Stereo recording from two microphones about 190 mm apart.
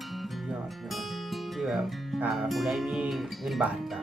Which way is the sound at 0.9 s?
Centre (ahead or behind).